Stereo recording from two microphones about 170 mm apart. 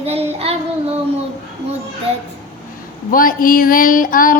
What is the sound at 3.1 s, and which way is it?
Speech, 55° left (ahead or behind).